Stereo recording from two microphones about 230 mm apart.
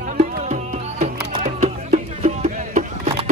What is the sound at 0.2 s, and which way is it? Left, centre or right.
Music, right.